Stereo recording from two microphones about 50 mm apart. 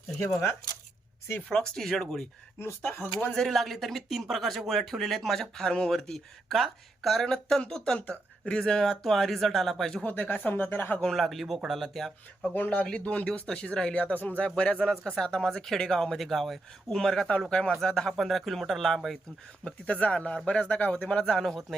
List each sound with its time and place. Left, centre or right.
1.4 s speech: centre
2.9 s speech: left
3.3 s speech: centre
5.4 s speech: centre
10.0 s speech: left
11.0 s speech: centre
12.5 s speech: left
14.4 s speech: centre
16.9 s speech: centre
18.2 s speech: centre
19.6 s speech: left; by 21.8 s centre